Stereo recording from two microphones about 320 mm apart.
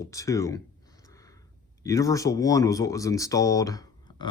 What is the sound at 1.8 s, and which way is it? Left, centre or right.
Speech, centre.